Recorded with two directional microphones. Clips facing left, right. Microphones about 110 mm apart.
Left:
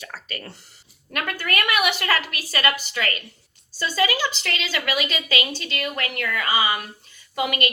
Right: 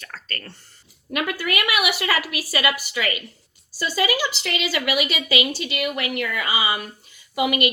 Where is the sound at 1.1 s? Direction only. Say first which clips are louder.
Right 2 dB; 10° right (ahead or behind).